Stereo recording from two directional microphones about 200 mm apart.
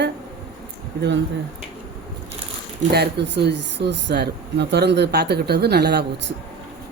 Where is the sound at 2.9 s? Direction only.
55° right (ahead or behind).